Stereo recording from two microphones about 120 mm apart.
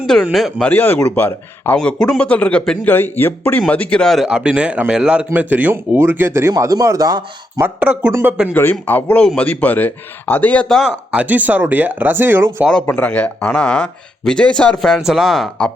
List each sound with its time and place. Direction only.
0.3 s speech: centre (ahead or behind)
0.6 s a man's voice: 15° left (ahead or behind); by 7.6 s 30° right (ahead or behind)
7.6 s a man's voice: 10° right (ahead or behind)
8.5 s speech: 15° left (ahead or behind)
11.1 s a man's voice: 10° right (ahead or behind)
12.8 s speech: 15° left (ahead or behind)